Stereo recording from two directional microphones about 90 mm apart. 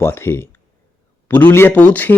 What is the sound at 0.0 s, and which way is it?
A man's voice, 25° left (ahead or behind).